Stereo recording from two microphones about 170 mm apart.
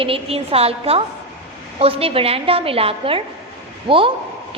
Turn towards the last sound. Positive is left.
turn(degrees=-30)  # may be behind; listen again after turning